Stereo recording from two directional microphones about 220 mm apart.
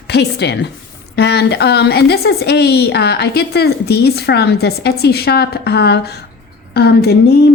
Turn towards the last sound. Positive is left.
turn(degrees=45)  # may be behind; listen again after turning